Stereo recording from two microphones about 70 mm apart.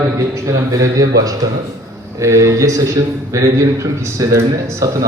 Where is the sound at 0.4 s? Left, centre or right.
Right.